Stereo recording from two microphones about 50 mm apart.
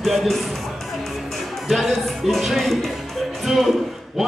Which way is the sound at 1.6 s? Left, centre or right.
Centre.